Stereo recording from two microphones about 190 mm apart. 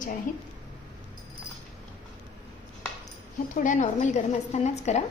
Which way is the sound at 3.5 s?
40° left (ahead or behind).